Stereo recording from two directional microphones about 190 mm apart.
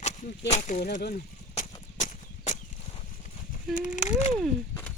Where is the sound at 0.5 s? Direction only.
35° left (ahead or behind).